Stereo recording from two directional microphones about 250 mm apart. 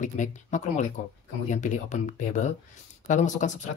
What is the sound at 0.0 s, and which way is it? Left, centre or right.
Speech, left.